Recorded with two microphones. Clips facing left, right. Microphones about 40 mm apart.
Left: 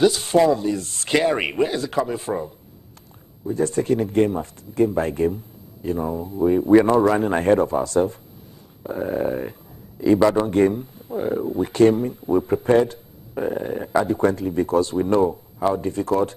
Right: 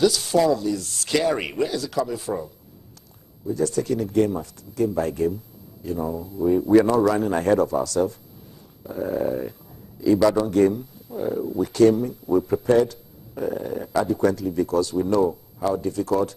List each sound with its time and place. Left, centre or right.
0.0 s speech: left